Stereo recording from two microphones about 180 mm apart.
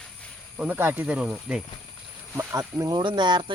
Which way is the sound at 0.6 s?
10° right (ahead or behind).